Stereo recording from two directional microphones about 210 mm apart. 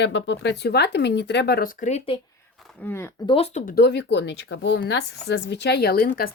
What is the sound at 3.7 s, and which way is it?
Speech, 50° left (ahead or behind).